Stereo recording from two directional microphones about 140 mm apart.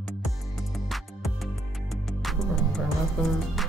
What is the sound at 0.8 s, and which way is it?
Music, centre (ahead or behind).